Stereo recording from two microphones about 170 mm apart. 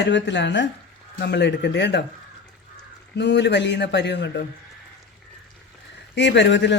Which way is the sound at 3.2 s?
90° left.